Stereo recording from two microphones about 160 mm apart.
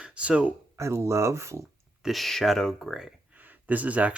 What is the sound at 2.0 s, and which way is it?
Speech, centre (ahead or behind).